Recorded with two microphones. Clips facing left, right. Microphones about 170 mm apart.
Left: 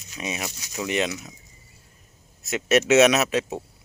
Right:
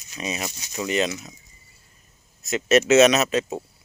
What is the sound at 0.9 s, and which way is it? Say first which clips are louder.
Speech: right 2 dB; 10° left (ahead or behind).